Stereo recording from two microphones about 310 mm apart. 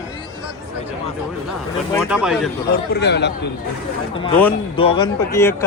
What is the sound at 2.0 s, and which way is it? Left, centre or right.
Speech, centre.